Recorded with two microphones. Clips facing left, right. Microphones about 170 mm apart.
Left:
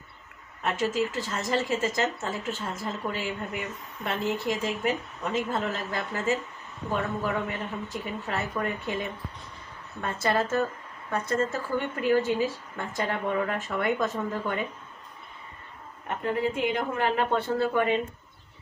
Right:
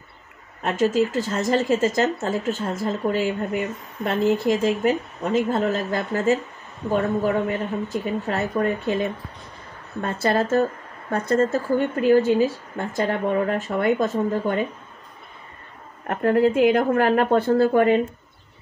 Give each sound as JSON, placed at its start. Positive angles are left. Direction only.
{"t": 0.6, "sound": "speech", "side_deg": -30}
{"t": 16.1, "sound": "speech", "side_deg": -65}
{"t": 17.3, "sound": "speech", "side_deg": -35}